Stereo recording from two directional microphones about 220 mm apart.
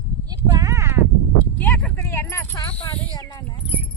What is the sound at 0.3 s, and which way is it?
Clip-clop, 15° right (ahead or behind).